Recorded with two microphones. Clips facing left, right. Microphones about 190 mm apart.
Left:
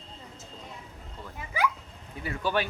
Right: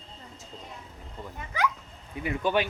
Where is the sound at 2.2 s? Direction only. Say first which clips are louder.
Right 3 dB; 20° right (ahead or behind).